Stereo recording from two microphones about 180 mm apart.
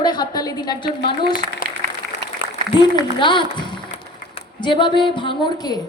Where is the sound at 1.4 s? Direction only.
45° right (ahead or behind).